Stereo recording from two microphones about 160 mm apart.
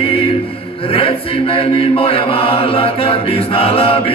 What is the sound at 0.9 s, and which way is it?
Chant, 35° left (ahead or behind).